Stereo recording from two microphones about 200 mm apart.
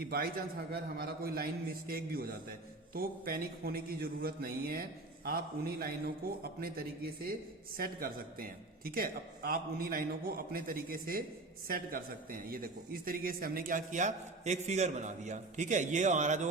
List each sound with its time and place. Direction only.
0.1 s a man's voice: 50° right (ahead or behind)